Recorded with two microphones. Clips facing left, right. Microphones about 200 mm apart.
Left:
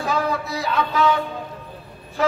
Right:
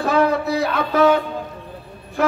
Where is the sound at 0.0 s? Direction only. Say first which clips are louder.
Right 6 dB; 60° right (ahead or behind).